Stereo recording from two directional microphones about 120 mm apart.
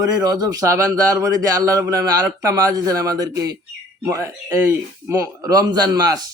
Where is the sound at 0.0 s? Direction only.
30° right (ahead or behind).